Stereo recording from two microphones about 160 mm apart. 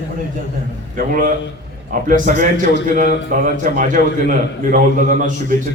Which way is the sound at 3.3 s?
50° right (ahead or behind).